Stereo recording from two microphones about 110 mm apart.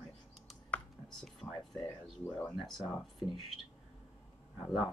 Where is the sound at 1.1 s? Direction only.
5° left (ahead or behind).